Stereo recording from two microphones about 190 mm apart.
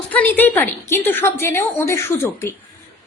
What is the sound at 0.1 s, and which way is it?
A woman's voice, 10° left (ahead or behind).